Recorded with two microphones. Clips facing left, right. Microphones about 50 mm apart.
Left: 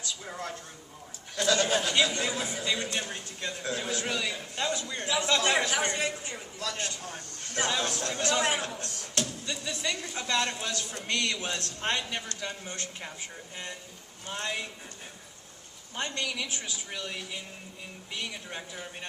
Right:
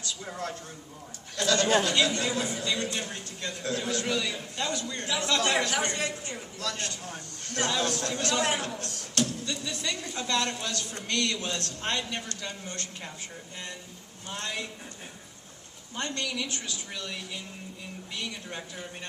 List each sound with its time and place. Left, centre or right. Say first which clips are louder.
1.4 s a sound: even; centre
1.8 s a man's voice: right 1 dB; centre
14.3 s a man's voice: left 1 dB; centre
16.0 s a man's voice: right 1 dB; centre